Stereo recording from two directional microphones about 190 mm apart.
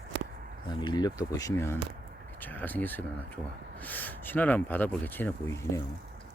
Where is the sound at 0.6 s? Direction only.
20° left (ahead or behind).